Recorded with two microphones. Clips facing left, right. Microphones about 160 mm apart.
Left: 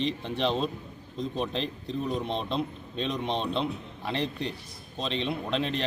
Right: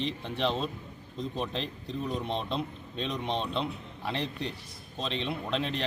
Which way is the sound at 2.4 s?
25° left (ahead or behind).